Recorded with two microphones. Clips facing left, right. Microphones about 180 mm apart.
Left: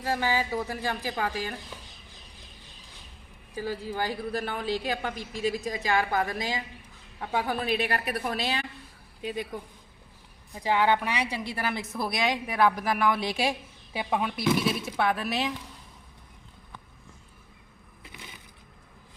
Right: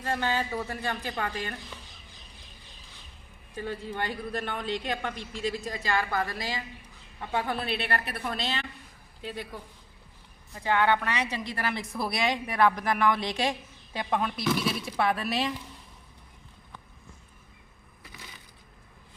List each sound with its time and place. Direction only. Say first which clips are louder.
0.0 s a woman's voice: left 2 dB; 5° left (ahead or behind)
3.5 s a woman's voice: left 2 dB; 5° left (ahead or behind)
18.0 s crushing: left 2 dB; 20° left (ahead or behind)